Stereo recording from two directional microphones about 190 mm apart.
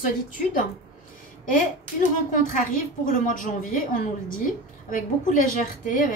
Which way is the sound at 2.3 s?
45° left (ahead or behind).